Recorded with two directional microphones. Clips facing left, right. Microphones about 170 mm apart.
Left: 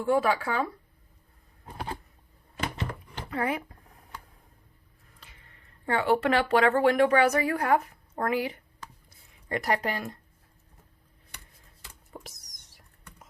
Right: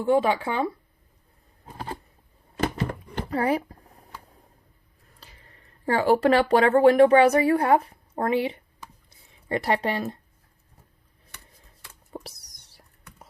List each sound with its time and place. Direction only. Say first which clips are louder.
0.0 s speech: right 3 dB; 25° right (ahead or behind)
3.2 s speech: right 5 dB; 35° right (ahead or behind)
5.2 s speech: right 4 dB; 35° right (ahead or behind)
9.0 s a sound: right 5 dB; 30° right (ahead or behind)
12.1 s whispering: right 7 dB; 35° right (ahead or behind)